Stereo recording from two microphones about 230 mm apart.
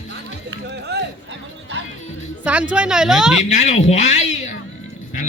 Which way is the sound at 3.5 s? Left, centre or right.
Left.